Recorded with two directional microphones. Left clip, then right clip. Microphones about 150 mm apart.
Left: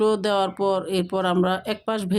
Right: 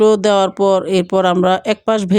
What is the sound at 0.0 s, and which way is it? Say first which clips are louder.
Speech: right 9 dB; 45° right (ahead or behind).